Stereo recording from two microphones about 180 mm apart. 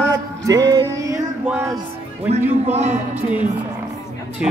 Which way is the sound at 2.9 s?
10° right (ahead or behind).